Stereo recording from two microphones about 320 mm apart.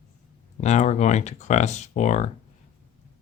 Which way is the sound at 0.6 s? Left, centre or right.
Left.